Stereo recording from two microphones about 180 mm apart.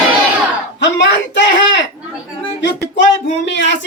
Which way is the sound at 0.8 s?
80° left.